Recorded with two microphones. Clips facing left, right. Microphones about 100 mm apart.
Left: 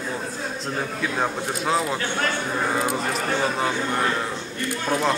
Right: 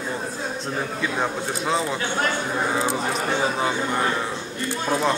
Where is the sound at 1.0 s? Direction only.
Centre (ahead or behind).